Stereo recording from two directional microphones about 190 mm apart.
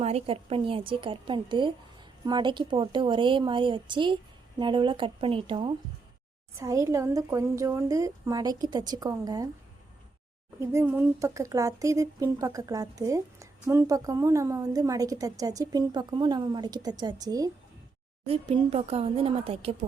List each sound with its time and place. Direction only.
0.0 s a woman's voice: 30° right (ahead or behind)
6.6 s speech: 15° right (ahead or behind)
10.6 s speech: 15° right (ahead or behind)
18.3 s speech: 30° right (ahead or behind)